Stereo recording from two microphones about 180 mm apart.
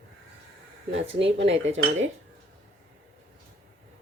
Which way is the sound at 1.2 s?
85° right.